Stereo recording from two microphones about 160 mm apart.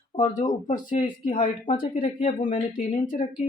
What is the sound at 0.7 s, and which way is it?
Speech, 55° left (ahead or behind).